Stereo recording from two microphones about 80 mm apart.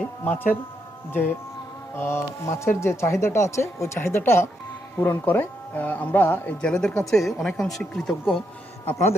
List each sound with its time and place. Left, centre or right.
0.3 s speech: left
6.7 s speech: centre
8.9 s speech: left